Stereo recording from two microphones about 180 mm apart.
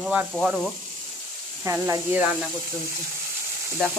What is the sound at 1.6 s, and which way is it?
Speech, 15° right (ahead or behind).